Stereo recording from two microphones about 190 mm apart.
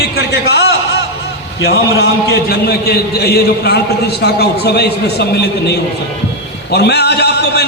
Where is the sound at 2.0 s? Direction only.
55° left (ahead or behind).